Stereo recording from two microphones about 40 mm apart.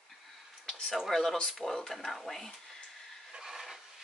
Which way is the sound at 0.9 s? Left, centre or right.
Centre.